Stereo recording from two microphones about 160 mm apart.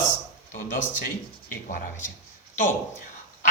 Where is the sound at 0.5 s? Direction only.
55° left (ahead or behind).